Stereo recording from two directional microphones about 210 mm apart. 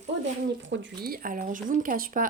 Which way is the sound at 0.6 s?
60° right (ahead or behind).